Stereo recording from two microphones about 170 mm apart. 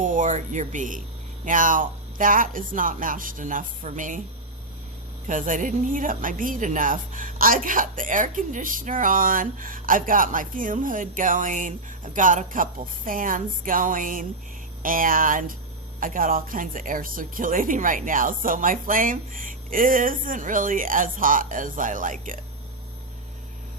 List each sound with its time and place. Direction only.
0.0 s a woman's voice: 50° right (ahead or behind)
5.2 s a woman's voice: 50° right (ahead or behind)